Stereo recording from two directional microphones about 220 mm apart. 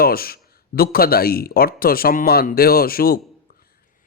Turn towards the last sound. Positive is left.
turn(degrees=45)  # may be behind; listen again after turning